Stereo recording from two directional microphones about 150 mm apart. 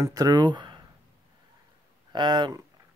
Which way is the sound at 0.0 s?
25° right (ahead or behind).